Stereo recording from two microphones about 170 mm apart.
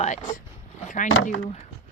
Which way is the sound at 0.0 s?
45° left (ahead or behind).